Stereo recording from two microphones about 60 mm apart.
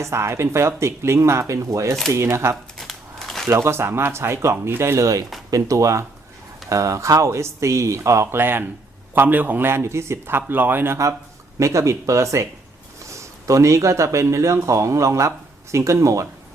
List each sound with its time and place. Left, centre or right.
0.0 s speech: right
2.7 s a sound: centre
3.5 s speech: right
5.5 s speech: right
8.4 s a man's voice: right
11.6 s speech: right